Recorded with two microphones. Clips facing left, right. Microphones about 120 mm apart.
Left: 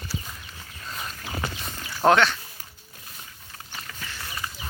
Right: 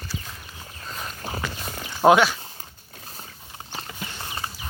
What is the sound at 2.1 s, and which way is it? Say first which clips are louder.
Speech: right 3 dB; 10° right (ahead or behind).